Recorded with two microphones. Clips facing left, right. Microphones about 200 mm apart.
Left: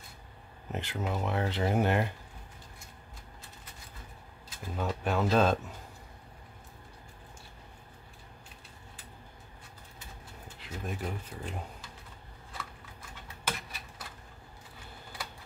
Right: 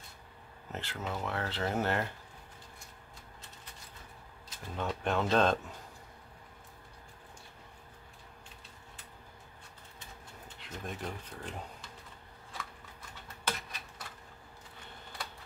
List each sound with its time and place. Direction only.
0.7 s speech: 15° left (ahead or behind)
4.7 s speech: 5° left (ahead or behind)
10.6 s speech: 5° left (ahead or behind)
13.5 s a sound: 5° left (ahead or behind)